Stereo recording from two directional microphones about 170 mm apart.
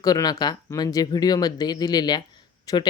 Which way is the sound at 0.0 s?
20° left (ahead or behind).